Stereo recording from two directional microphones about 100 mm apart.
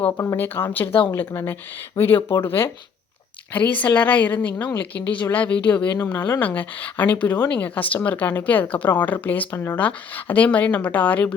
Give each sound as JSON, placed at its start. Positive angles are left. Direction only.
{"t": 0.3, "sound": "speech", "side_deg": 20}
{"t": 0.9, "sound": "speech", "side_deg": 60}
{"t": 1.1, "sound": "speech", "side_deg": 20}